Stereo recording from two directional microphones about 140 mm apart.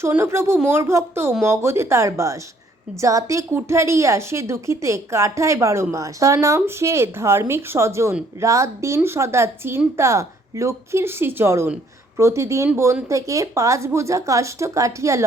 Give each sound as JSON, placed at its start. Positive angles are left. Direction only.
{"t": 0.2, "sound": "a woman's voice", "side_deg": -20}